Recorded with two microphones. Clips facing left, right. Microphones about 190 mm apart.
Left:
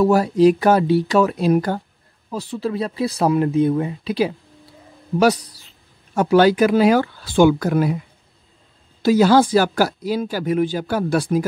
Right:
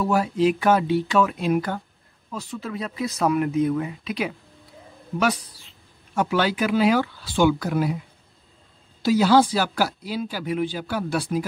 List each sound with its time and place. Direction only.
0.0 s speech: 40° left (ahead or behind)
9.0 s speech: 50° left (ahead or behind)